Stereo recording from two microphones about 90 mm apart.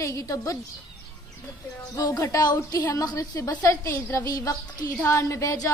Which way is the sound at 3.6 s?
30° left (ahead or behind).